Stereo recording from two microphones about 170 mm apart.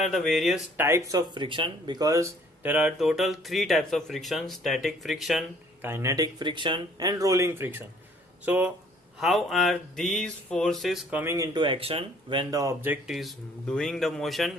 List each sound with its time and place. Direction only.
0.0 s speech: centre (ahead or behind)
0.8 s speech: 15° right (ahead or behind)
5.8 s speech: 15° right (ahead or behind)
11.2 s speech: 15° right (ahead or behind); by 14.5 s centre (ahead or behind)